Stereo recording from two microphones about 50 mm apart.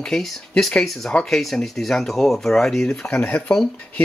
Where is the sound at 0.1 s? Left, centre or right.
Centre.